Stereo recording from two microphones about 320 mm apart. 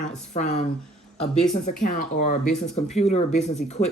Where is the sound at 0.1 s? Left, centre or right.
Left.